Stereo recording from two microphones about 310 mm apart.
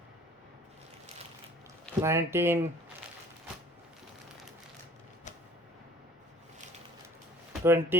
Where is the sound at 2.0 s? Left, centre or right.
Centre.